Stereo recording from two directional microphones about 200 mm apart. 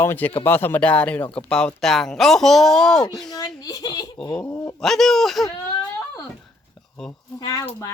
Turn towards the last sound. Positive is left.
turn(degrees=20)  # may be behind; listen again after turning